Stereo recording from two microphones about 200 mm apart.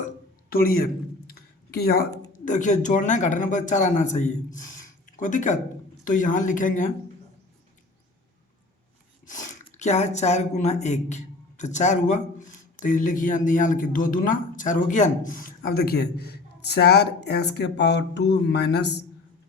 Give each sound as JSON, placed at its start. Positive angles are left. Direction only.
{"t": 0.5, "sound": "speech", "side_deg": 50}
{"t": 1.3, "sound": "a sound", "side_deg": 50}
{"t": 2.4, "sound": "speech", "side_deg": 40}
{"t": 9.3, "sound": "squish", "side_deg": 40}
{"t": 9.6, "sound": "speech", "side_deg": 35}